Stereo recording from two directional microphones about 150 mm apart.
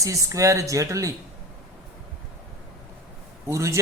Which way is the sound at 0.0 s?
20° right (ahead or behind).